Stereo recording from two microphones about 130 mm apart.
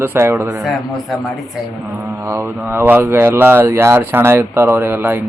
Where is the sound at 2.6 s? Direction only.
15° right (ahead or behind).